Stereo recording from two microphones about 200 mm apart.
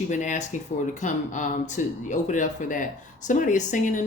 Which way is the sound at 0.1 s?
40° left (ahead or behind).